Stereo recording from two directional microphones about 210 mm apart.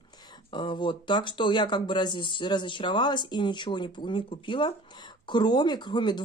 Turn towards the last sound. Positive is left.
turn(degrees=20)  # may be behind; listen again after turning